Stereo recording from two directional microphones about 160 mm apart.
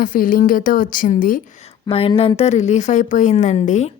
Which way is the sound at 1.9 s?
35° left (ahead or behind).